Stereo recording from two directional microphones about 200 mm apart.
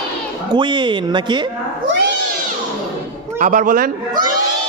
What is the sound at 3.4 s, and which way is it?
Speech, 40° right (ahead or behind).